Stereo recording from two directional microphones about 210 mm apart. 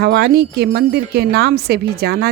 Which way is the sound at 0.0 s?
50° right (ahead or behind).